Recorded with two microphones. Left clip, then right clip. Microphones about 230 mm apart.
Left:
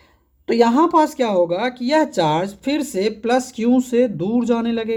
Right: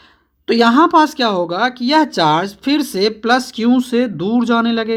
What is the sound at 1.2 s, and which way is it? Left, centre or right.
Speech, right.